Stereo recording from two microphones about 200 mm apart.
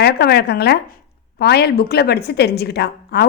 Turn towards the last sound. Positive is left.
turn(degrees=55)  # may be behind; listen again after turning